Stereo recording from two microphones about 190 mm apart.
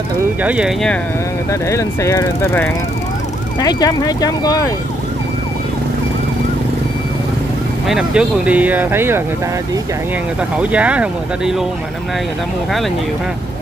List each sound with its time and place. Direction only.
0.4 s speech: 5° right (ahead or behind)
1.5 s speech: 15° left (ahead or behind)
7.9 s speech: 5° right (ahead or behind)
10.6 s speech: 5° right (ahead or behind)